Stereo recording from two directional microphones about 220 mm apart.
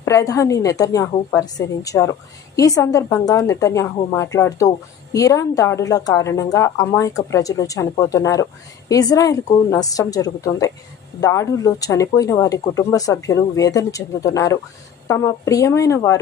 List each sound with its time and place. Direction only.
0.0 s speech: 15° left (ahead or behind)